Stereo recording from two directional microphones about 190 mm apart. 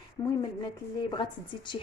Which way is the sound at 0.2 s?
20° left (ahead or behind).